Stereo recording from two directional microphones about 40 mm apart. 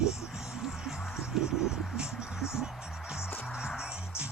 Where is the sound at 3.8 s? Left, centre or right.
Right.